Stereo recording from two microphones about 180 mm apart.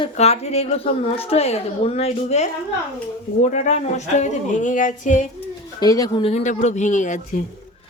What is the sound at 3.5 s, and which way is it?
Speech, 40° left (ahead or behind).